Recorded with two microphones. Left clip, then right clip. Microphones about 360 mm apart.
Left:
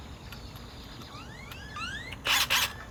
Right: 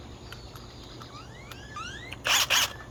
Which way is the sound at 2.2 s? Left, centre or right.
Centre.